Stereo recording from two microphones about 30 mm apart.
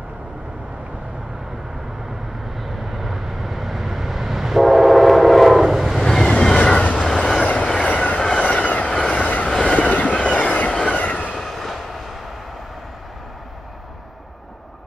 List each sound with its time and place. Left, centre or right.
2.5 s vehicle: centre
5.6 s train: centre
6.4 s train: left
6.8 s train: left
7.2 s train: left
7.8 s train: left
11.1 s train: left
11.3 s train: centre